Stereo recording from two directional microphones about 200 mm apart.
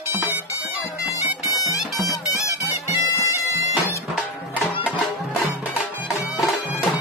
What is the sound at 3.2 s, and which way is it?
Bagpipes, 15° left (ahead or behind).